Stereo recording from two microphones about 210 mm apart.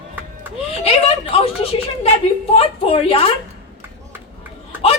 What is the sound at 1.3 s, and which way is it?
A woman's voice, 25° left (ahead or behind).